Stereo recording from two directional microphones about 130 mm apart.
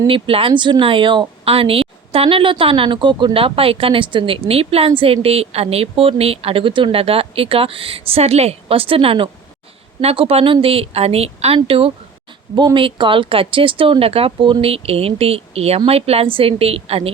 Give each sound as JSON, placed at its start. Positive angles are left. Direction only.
{"t": 0.1, "sound": "speech", "side_deg": -45}